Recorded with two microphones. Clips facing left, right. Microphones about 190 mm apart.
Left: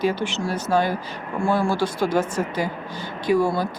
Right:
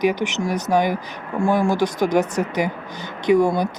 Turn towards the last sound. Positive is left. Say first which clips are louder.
# right 3 dB
turn(degrees=-20)  # may be behind; listen again after turning